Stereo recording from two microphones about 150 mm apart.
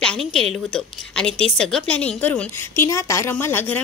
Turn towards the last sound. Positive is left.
turn(degrees=15)  # may be behind; listen again after turning